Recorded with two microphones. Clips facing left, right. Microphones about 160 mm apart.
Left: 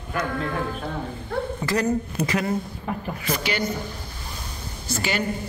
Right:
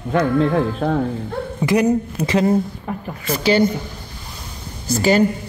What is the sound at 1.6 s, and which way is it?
Speech, 15° right (ahead or behind).